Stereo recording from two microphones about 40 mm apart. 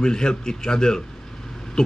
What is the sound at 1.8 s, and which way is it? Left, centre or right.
Owl, centre.